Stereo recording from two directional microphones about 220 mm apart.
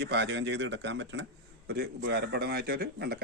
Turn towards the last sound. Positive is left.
turn(degrees=-45)  # may be behind; listen again after turning